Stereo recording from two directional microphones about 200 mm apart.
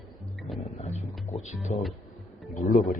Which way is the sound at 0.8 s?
35° left (ahead or behind).